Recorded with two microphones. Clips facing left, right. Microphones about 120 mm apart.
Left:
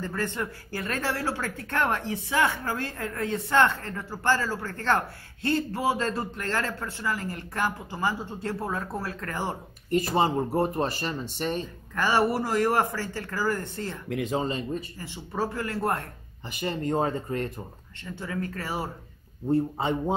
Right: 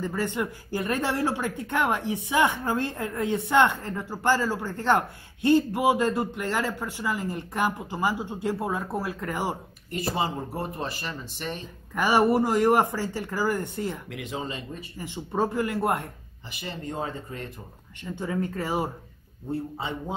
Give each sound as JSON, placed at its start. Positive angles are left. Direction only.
{"t": 0.0, "sound": "speech", "side_deg": -15}
{"t": 10.1, "sound": "speech", "side_deg": 45}
{"t": 11.9, "sound": "speech", "side_deg": -15}
{"t": 14.0, "sound": "speech", "side_deg": 40}
{"t": 15.0, "sound": "speech", "side_deg": -20}
{"t": 16.4, "sound": "speech", "side_deg": 50}
{"t": 18.0, "sound": "speech", "side_deg": -20}
{"t": 19.8, "sound": "speech", "side_deg": 50}